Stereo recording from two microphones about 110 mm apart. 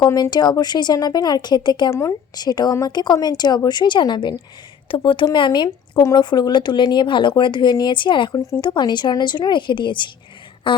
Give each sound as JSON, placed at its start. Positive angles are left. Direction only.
{"t": 0.0, "sound": "speech", "side_deg": 40}
{"t": 1.9, "sound": "speech", "side_deg": 25}
{"t": 2.3, "sound": "speech", "side_deg": 40}
{"t": 10.7, "sound": "a sound", "side_deg": 50}